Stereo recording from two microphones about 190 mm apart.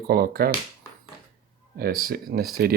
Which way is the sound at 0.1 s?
55° right (ahead or behind).